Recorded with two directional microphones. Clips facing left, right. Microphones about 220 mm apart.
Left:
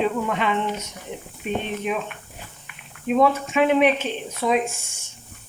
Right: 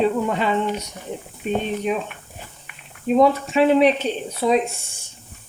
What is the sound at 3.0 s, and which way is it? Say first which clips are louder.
Speech: right 3 dB; 35° right (ahead or behind).